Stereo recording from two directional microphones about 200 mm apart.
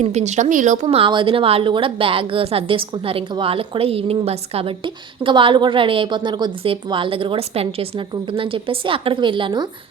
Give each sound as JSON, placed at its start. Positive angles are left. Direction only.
{"t": 0.0, "sound": "speech", "side_deg": -35}